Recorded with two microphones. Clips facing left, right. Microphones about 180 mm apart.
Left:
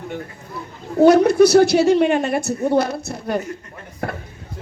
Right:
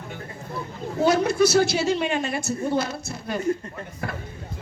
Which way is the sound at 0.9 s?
60° left (ahead or behind).